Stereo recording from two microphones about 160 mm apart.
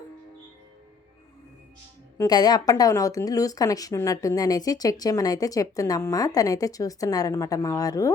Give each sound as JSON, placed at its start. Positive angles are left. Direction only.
{"t": 2.1, "sound": "speech", "side_deg": 25}